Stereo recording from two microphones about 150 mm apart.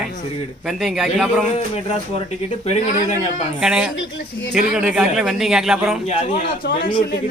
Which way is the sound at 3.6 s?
5° right (ahead or behind).